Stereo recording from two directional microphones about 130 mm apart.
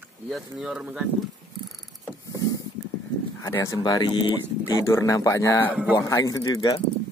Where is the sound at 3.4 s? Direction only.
20° left (ahead or behind).